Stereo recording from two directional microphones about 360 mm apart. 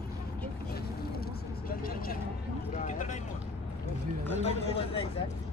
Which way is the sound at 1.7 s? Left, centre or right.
Left.